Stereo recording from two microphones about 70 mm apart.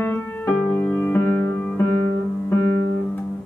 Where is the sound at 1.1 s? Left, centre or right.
Left.